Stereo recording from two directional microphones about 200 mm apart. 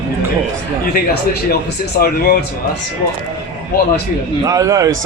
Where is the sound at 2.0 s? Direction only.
45° left (ahead or behind).